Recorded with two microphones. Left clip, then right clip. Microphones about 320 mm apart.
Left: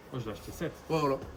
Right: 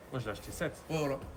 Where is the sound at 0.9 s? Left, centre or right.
Centre.